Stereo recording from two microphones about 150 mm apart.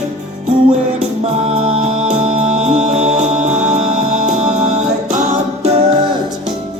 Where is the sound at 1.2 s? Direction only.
45° right (ahead or behind).